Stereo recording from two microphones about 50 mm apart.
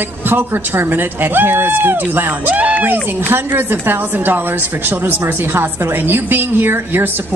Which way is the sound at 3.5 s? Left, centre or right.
Right.